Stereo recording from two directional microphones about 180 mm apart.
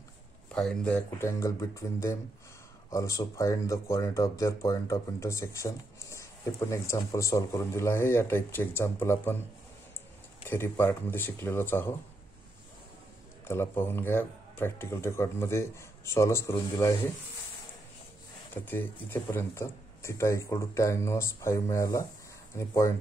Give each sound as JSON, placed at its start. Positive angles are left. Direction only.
{"t": 0.5, "sound": "speech", "side_deg": 5}
{"t": 10.5, "sound": "speech", "side_deg": 10}
{"t": 13.5, "sound": "speech", "side_deg": 15}
{"t": 18.5, "sound": "speech", "side_deg": 10}